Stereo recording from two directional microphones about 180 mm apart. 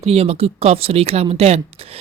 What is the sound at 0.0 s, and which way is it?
Speech, 35° right (ahead or behind).